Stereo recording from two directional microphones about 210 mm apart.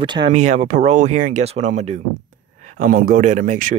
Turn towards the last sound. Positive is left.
turn(degrees=-40)  # may be behind; listen again after turning